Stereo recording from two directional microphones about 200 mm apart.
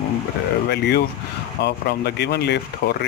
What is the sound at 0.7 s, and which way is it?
Speech, 55° left (ahead or behind).